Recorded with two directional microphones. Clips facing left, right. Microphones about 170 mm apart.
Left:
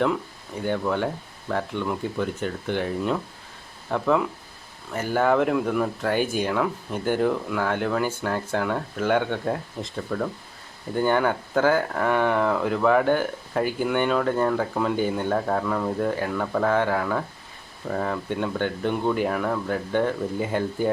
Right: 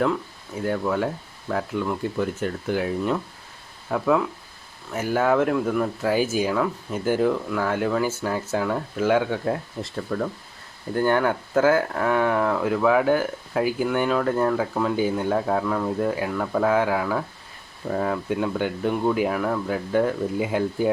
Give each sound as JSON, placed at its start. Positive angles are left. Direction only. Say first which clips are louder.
{"t": 0.6, "sound": "speech", "louder": "right 1 dB", "side_deg": 0}